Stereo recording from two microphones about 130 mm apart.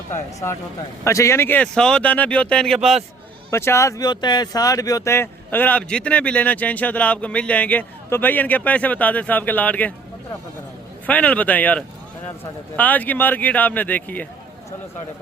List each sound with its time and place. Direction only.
0.1 s speech: 20° left (ahead or behind)
1.6 s speech: 5° left (ahead or behind)
3.5 s speech: 20° left (ahead or behind)
11.0 s speech: 10° left (ahead or behind)